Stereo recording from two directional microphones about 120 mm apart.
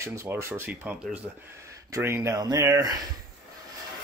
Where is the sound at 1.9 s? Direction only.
25° right (ahead or behind).